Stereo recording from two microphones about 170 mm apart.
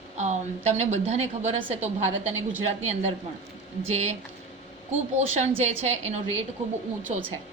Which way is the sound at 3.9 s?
40° right (ahead or behind).